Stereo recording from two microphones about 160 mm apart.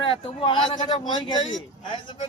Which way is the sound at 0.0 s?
30° left (ahead or behind).